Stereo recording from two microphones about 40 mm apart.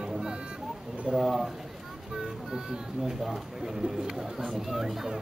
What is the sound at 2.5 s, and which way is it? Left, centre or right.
Speech, centre.